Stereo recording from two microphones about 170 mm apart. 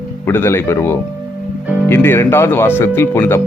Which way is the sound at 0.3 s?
15° left (ahead or behind).